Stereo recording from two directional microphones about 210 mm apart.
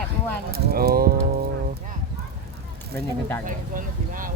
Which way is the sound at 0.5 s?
45° right (ahead or behind).